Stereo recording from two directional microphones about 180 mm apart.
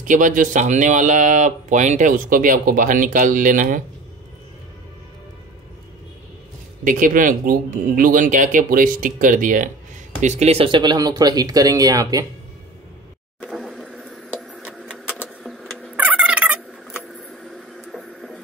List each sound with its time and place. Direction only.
0.0 s speech: 45° right (ahead or behind)
6.8 s speech: 50° right (ahead or behind); by 12.3 s 20° right (ahead or behind)
13.4 s a sound: 5° left (ahead or behind)